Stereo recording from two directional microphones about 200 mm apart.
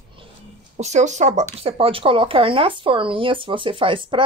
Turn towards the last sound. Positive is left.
turn(degrees=-25)  # may be behind; listen again after turning